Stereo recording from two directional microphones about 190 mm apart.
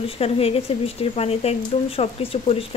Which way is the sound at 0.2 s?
30° left (ahead or behind).